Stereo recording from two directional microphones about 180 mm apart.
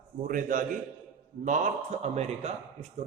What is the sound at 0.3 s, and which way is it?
A man's voice, 50° right (ahead or behind).